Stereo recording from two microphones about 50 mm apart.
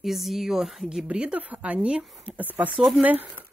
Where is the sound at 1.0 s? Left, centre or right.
Right.